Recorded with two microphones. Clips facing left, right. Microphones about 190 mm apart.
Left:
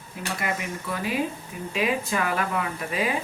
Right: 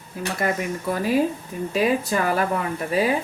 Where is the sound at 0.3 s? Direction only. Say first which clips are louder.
Right 6 dB; 40° right (ahead or behind).